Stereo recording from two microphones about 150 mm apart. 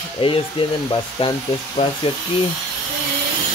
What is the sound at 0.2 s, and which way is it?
Speech, 35° left (ahead or behind).